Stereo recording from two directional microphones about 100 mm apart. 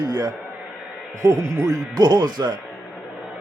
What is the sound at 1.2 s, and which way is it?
Speech, 35° right (ahead or behind).